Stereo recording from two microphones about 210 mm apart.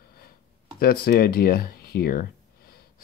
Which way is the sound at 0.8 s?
45° left (ahead or behind).